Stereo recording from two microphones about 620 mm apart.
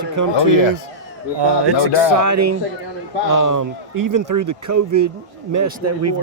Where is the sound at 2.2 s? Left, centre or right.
Right.